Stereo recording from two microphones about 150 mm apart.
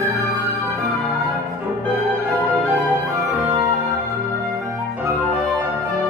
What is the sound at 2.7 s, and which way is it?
Music, 20° right (ahead or behind).